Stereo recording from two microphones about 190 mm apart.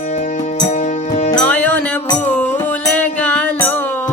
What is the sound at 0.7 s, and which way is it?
Music, 40° left (ahead or behind).